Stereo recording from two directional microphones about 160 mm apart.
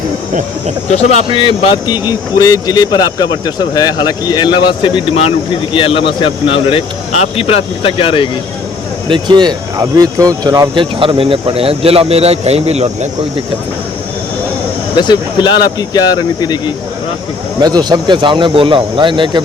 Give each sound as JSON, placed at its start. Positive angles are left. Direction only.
{"t": 0.9, "sound": "speech", "side_deg": 45}
{"t": 1.4, "sound": "a man's voice", "side_deg": 30}
{"t": 9.0, "sound": "speech", "side_deg": -30}
{"t": 14.9, "sound": "speech", "side_deg": 30}
{"t": 17.6, "sound": "speech", "side_deg": -25}